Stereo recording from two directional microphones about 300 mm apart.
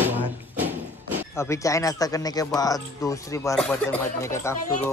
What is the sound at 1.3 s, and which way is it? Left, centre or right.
Speech, centre.